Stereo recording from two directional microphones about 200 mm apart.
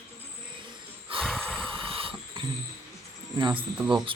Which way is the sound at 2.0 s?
25° right (ahead or behind).